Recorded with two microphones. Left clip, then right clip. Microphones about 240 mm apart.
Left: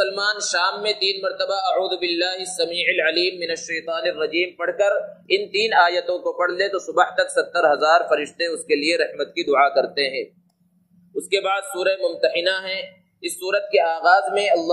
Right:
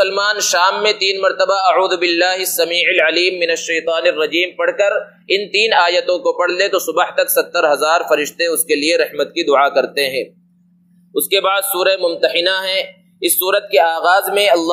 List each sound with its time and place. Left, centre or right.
0.0 s a man's voice: right